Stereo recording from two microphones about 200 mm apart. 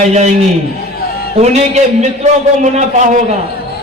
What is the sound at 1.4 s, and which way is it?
A man's voice, 35° right (ahead or behind).